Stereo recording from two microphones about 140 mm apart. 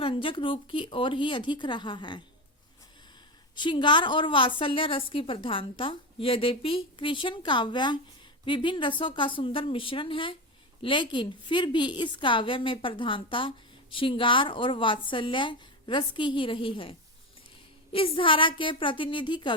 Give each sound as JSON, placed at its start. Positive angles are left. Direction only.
{"t": 0.0, "sound": "a woman's voice", "side_deg": 40}
{"t": 3.5, "sound": "a woman's voice", "side_deg": 35}
{"t": 17.9, "sound": "a woman's voice", "side_deg": 40}